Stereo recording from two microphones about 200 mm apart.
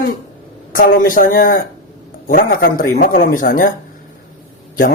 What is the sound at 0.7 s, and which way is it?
A man's voice, 45° left (ahead or behind).